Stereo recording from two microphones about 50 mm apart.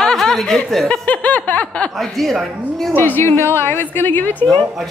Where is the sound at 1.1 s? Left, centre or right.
Left.